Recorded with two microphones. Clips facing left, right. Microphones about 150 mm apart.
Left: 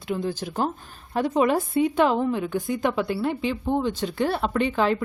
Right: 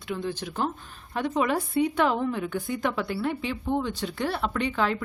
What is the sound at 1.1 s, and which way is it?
Speech, 35° left (ahead or behind).